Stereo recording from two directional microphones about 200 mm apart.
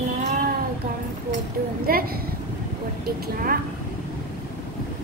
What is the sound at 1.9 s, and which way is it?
A woman's voice, 45° right (ahead or behind).